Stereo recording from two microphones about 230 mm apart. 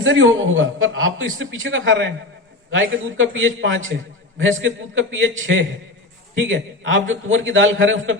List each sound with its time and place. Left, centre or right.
0.0 s a man's voice: right